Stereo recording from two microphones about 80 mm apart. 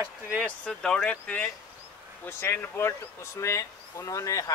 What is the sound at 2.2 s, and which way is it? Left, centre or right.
Speech, left.